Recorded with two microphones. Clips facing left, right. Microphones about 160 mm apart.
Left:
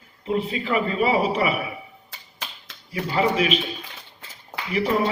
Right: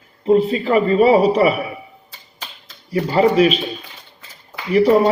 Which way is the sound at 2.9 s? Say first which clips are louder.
Right 7 dB; 40° right (ahead or behind).